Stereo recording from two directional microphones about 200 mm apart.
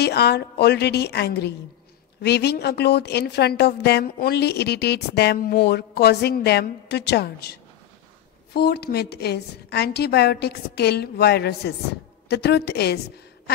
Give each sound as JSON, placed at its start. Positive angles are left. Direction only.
{"t": 0.0, "sound": "speech", "side_deg": 55}
{"t": 8.5, "sound": "speech", "side_deg": 55}